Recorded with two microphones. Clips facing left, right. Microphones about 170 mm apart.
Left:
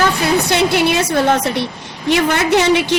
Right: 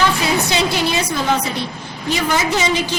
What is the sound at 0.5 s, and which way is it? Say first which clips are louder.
A woman's voice: left 4 dB; 60° left (ahead or behind).